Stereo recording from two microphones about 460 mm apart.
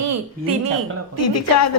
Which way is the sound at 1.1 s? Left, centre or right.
Left.